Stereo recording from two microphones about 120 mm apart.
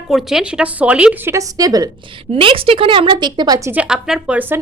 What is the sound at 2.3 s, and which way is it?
A woman's voice, 50° right (ahead or behind).